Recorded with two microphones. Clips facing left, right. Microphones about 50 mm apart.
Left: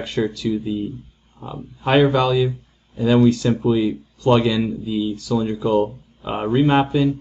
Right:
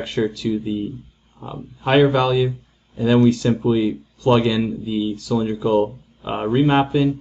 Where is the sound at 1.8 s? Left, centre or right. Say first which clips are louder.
Even; centre.